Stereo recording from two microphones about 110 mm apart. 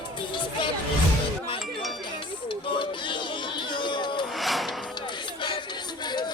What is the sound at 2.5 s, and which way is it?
Music, 50° left (ahead or behind).